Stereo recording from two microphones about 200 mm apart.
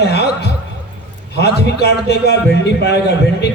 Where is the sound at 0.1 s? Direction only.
55° left (ahead or behind).